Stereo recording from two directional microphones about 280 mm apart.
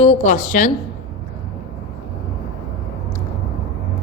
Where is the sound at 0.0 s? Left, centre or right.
Left.